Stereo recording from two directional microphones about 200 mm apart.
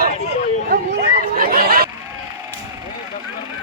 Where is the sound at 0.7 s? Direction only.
45° right (ahead or behind).